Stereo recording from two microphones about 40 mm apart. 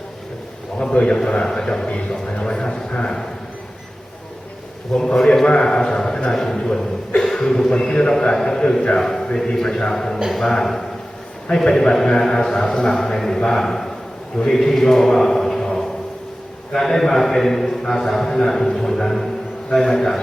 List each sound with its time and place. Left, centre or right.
1.0 s a man's voice: left
5.1 s a man's voice: centre